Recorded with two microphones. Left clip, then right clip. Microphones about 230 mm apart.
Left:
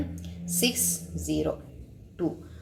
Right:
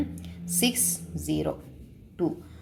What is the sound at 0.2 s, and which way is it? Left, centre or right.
A woman's voice, right.